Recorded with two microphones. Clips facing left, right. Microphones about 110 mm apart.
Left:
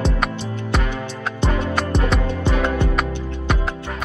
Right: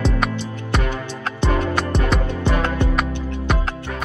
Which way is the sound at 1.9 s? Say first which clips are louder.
Even; centre (ahead or behind).